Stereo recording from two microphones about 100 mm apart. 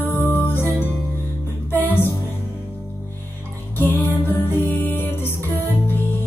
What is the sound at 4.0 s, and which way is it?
Music, 20° left (ahead or behind).